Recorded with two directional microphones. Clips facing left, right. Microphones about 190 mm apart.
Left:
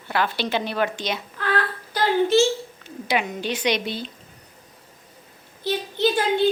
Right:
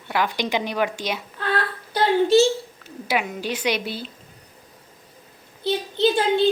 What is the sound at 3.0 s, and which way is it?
A woman's voice, 5° right (ahead or behind).